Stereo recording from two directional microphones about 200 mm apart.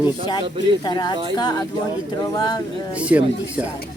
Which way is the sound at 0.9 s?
20° left (ahead or behind).